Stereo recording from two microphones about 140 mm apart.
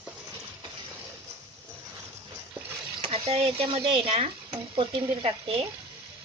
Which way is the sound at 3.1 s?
45° right (ahead or behind).